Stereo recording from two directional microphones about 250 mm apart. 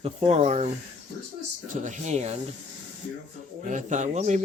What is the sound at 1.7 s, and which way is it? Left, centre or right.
Speech, right.